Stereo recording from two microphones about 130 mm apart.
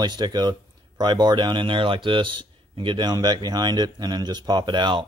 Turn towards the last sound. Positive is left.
turn(degrees=-35)  # may be behind; listen again after turning